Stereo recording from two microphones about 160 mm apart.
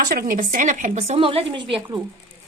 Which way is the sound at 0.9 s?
35° right (ahead or behind).